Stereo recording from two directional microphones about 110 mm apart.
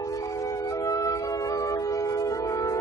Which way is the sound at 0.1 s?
30° left (ahead or behind).